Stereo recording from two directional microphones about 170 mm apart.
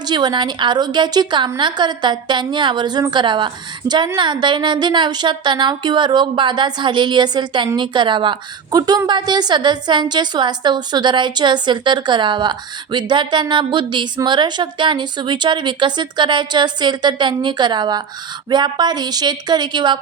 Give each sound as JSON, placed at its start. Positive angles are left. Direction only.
{"t": 0.1, "sound": "a woman's voice", "side_deg": -25}